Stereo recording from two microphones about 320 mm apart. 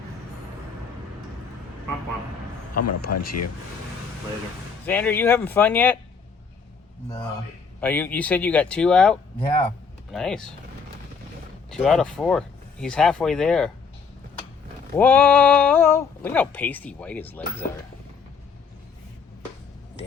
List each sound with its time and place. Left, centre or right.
3.1 s speech: left
4.9 s speech: centre
7.8 s speech: centre
9.4 s speech: left
10.1 s speech: centre
11.7 s speech: centre
14.9 s speech: centre